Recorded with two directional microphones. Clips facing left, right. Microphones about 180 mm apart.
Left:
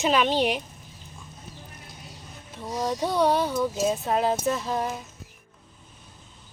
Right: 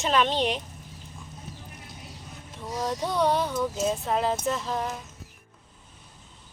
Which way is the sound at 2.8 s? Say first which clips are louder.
Left 2 dB; centre (ahead or behind).